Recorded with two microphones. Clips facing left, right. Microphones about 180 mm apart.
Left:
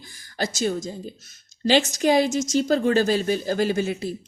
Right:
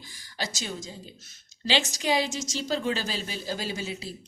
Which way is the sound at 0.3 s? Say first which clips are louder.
Left 10 dB; 50° left (ahead or behind).